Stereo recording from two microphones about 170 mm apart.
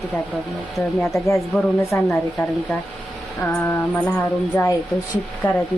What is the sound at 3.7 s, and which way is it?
Speech, 10° left (ahead or behind).